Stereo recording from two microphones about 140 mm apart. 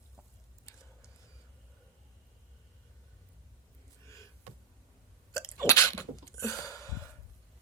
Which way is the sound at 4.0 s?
20° left (ahead or behind).